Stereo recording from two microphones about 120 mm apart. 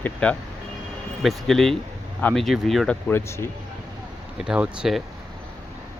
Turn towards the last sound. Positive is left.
turn(degrees=-5)  # may be behind; listen again after turning